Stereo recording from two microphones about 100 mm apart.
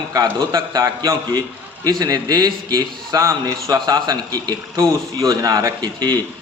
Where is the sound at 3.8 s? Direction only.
45° right (ahead or behind).